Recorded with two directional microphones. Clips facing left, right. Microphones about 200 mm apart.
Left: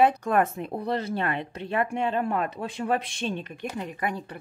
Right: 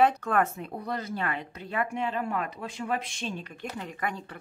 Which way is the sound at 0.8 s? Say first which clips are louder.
Left 4 dB; 30° left (ahead or behind).